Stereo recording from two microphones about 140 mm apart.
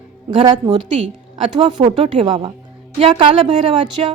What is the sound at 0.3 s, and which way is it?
A woman's voice, 35° right (ahead or behind).